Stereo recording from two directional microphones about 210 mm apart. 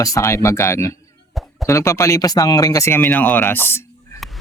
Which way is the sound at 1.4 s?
Centre (ahead or behind).